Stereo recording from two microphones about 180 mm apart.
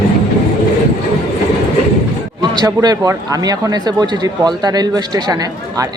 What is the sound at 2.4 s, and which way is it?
Speech, 25° right (ahead or behind).